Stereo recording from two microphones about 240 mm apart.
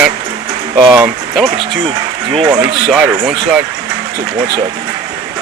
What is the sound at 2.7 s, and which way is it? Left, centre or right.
Speech, centre.